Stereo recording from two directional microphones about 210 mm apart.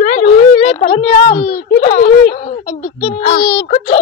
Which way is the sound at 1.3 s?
45° left (ahead or behind).